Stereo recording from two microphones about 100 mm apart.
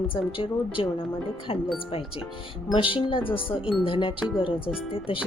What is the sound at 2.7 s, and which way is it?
A woman's voice, 60° left (ahead or behind).